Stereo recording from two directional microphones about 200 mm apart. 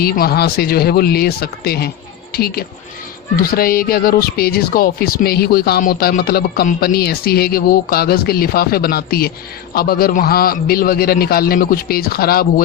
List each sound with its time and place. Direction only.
0.0 s speech: 50° left (ahead or behind)